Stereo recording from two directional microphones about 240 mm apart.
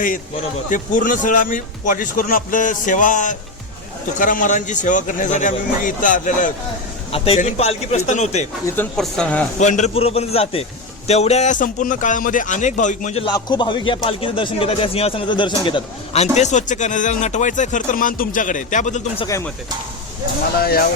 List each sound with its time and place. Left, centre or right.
0.7 s a man's voice: left
8.6 s speech: centre
9.6 s a man's voice: left
13.2 s a man's voice: centre
20.6 s a man's voice: left